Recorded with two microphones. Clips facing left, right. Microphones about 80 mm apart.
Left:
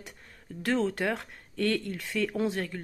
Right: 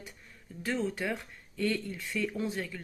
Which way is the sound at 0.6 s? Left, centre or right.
Left.